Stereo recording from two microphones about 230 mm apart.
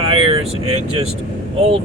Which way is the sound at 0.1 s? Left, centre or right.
Right.